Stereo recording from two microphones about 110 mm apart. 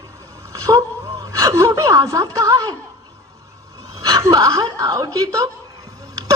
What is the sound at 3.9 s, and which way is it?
A woman's voice, 30° right (ahead or behind).